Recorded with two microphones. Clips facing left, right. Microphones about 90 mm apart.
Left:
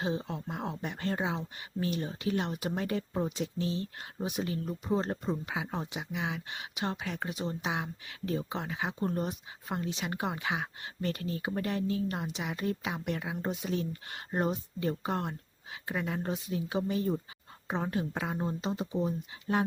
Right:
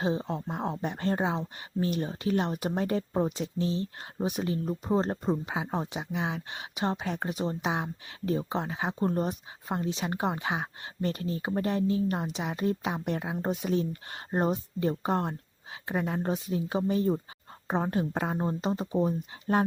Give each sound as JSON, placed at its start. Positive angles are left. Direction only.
{"t": 0.0, "sound": "speech", "side_deg": -30}
{"t": 13.5, "sound": "speech", "side_deg": -45}
{"t": 13.7, "sound": "speech", "side_deg": -30}